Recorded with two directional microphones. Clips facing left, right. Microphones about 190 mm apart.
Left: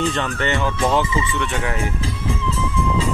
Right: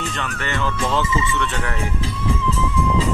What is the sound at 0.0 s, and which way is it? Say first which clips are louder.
Speech: left 6 dB; 30° left (ahead or behind).